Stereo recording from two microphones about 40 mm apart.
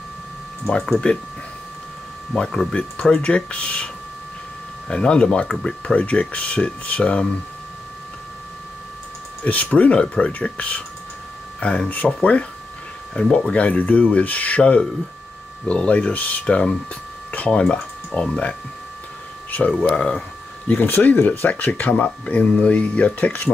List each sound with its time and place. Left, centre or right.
1.0 s speech: left
2.3 s speech: centre
5.9 s speech: left
9.4 s speech: left
14.6 s speech: left
16.4 s speech: left
19.5 s speech: left
21.0 s speech: left